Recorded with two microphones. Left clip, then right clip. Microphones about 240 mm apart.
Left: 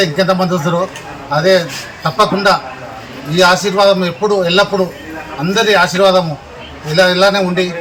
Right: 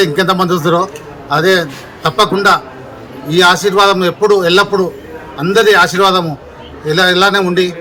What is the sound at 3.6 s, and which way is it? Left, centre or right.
A man's voice, right.